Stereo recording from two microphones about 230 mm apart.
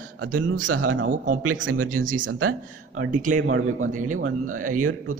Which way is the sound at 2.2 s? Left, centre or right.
Right.